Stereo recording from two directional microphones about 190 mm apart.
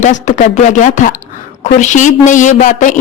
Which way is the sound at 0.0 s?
40° left (ahead or behind).